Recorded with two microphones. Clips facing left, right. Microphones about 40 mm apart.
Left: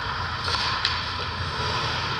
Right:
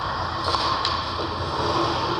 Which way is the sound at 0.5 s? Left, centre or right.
Left.